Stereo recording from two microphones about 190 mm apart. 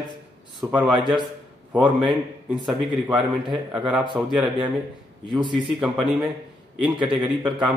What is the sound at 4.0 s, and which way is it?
A man's voice, 25° right (ahead or behind).